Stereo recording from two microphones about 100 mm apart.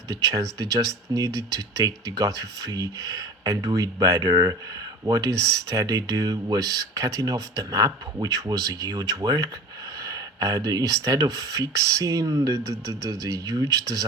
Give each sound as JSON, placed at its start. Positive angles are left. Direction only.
{"t": 0.1, "sound": "speech", "side_deg": -40}